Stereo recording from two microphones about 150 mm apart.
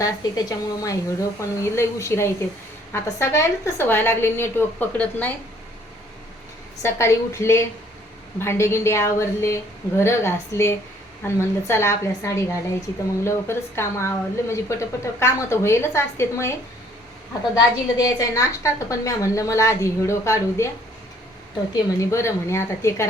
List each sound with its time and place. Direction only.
0.2 s a woman's voice: 25° left (ahead or behind)
6.8 s a woman's voice: 20° left (ahead or behind)
21.7 s a woman's voice: 20° left (ahead or behind)